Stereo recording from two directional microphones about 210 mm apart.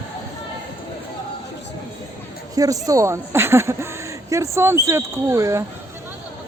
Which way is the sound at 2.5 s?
15° right (ahead or behind).